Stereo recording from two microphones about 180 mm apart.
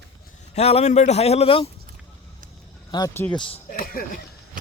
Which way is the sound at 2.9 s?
20° left (ahead or behind).